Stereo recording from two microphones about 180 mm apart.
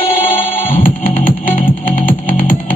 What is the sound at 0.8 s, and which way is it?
Music, 50° left (ahead or behind).